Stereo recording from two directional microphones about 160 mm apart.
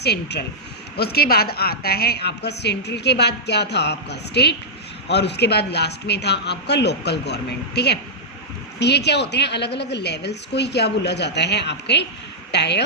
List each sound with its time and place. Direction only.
0.0 s a woman's voice: 90° left
0.9 s a woman's voice: 80° left